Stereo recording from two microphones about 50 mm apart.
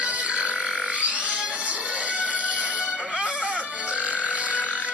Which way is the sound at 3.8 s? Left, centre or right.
Right.